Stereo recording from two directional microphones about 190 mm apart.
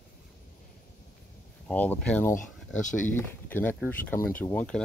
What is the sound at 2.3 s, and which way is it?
Speech, 45° left (ahead or behind).